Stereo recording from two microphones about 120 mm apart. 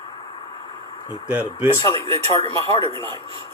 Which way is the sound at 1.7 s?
25° left (ahead or behind).